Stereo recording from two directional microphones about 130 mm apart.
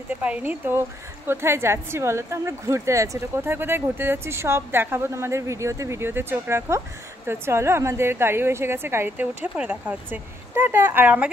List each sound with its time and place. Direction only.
0.2 s a woman's voice: 10° right (ahead or behind)